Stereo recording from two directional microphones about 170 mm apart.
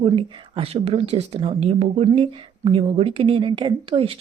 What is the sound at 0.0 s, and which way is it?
Speech, 35° right (ahead or behind).